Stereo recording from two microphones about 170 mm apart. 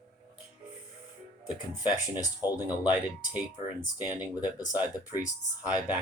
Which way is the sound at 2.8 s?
10° right (ahead or behind).